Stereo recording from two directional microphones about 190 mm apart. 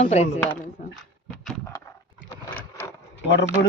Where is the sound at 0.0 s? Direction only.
35° left (ahead or behind).